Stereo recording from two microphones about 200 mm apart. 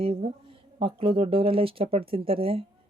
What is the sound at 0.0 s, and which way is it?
Speech, 30° right (ahead or behind).